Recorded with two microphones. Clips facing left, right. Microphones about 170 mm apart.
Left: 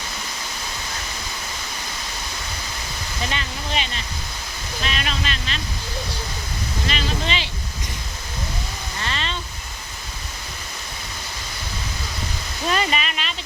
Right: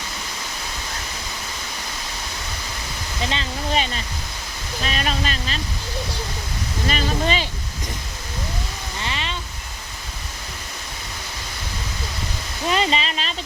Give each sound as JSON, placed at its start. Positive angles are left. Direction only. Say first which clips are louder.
{"t": 3.2, "sound": "speech", "louder": "right 2 dB", "side_deg": -25}
{"t": 3.7, "sound": "speech", "louder": "right 4 dB", "side_deg": -40}
{"t": 6.8, "sound": "speech", "louder": "right 5 dB", "side_deg": -45}
{"t": 9.0, "sound": "a sound", "louder": "even", "side_deg": -15}
{"t": 12.6, "sound": "speech", "louder": "right 2 dB", "side_deg": -20}